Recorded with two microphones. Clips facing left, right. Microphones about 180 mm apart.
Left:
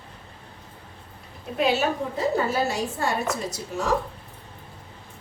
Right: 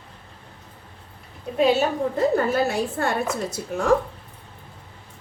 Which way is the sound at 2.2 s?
55° right (ahead or behind).